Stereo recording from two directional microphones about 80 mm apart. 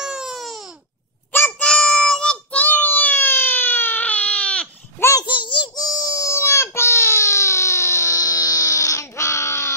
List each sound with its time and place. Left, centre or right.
0.0 s baby cry: centre
1.6 s child singing: centre
5.2 s a sound: left
5.9 s baby cry: left